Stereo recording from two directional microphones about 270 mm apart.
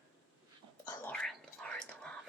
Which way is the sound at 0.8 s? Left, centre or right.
Centre.